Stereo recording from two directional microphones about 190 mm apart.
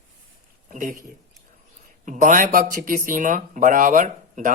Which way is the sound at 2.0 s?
40° right (ahead or behind).